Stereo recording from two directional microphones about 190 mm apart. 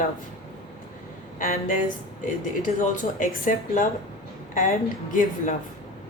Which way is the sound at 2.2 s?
45° left (ahead or behind).